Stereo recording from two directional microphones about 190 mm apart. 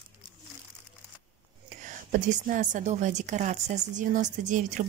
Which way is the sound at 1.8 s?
45° right (ahead or behind).